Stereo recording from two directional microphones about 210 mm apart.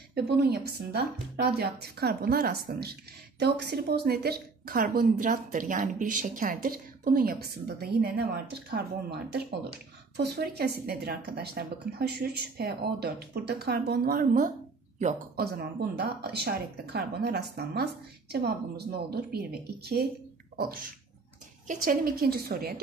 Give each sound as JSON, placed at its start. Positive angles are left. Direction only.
{"t": 0.1, "sound": "speech", "side_deg": -50}